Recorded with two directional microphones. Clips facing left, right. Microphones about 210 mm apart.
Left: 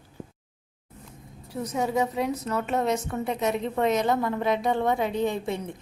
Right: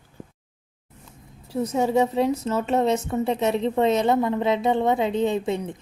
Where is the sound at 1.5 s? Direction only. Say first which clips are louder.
Right 5 dB; 25° right (ahead or behind).